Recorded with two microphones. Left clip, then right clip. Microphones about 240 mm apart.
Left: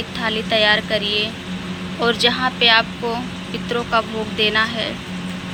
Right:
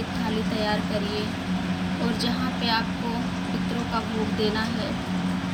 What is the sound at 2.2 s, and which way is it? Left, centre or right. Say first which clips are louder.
Speech: left 15 dB; centre.